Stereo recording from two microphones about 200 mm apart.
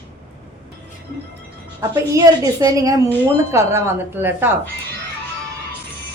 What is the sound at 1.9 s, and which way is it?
A woman's voice, 20° right (ahead or behind).